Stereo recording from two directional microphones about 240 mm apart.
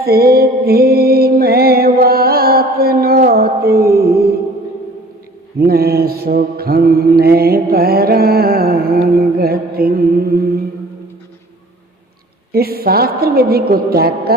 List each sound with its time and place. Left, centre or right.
0.0 s music: right
5.5 s mantra: right
12.5 s a woman's voice: right